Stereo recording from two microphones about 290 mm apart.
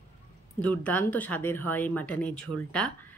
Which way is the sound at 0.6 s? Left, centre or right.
Centre.